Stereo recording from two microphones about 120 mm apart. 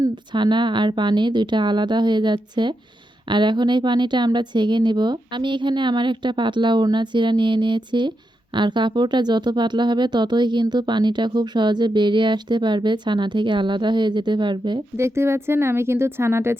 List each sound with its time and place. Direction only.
0.3 s speech: 40° right (ahead or behind)
14.9 s a woman's voice: 20° right (ahead or behind)